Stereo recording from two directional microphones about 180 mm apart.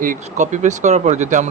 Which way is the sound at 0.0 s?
45° right (ahead or behind).